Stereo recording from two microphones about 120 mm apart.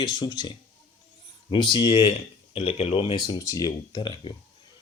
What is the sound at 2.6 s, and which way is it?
Speech, 55° left (ahead or behind).